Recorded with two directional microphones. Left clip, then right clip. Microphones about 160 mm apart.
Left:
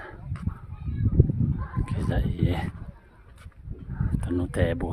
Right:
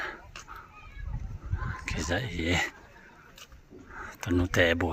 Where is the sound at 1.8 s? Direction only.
20° left (ahead or behind).